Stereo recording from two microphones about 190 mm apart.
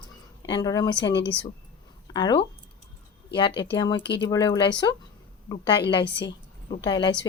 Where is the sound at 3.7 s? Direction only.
20° left (ahead or behind).